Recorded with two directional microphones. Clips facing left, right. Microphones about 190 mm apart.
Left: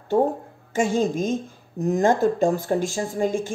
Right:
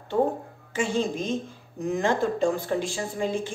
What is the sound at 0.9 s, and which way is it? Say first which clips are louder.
Speech: left 4 dB; 45° left (ahead or behind).